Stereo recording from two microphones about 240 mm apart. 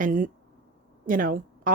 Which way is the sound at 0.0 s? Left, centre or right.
Right.